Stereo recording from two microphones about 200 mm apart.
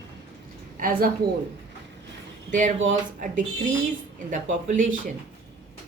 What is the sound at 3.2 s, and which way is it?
Speech, 40° right (ahead or behind).